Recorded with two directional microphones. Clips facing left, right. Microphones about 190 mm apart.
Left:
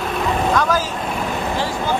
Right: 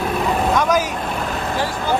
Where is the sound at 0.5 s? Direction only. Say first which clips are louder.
Right 1 dB; 20° right (ahead or behind).